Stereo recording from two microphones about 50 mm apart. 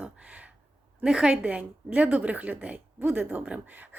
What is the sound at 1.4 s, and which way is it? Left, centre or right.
A woman's voice, right.